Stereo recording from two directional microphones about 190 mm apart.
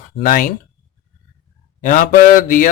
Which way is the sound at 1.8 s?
45° left (ahead or behind).